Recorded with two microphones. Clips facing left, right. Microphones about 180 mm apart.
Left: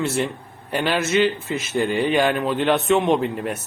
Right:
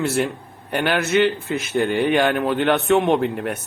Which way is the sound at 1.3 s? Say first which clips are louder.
Right 1 dB; 60° right (ahead or behind).